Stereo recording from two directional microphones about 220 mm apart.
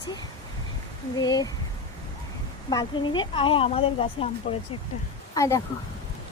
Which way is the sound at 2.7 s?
20° left (ahead or behind).